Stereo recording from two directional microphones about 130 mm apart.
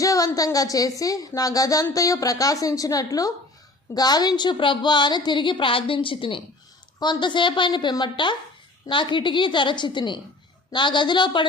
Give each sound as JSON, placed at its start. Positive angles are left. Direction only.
{"t": 0.0, "sound": "a woman's voice", "side_deg": 25}